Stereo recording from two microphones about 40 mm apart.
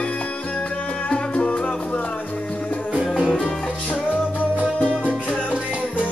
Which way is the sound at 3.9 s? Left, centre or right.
Left.